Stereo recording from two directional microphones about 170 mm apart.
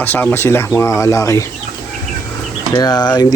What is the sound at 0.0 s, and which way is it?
Speech, 10° left (ahead or behind).